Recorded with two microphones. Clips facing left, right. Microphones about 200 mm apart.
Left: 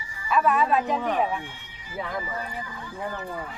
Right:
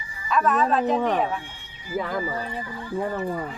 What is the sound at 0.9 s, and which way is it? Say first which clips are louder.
Speech: right 2 dB; 40° right (ahead or behind).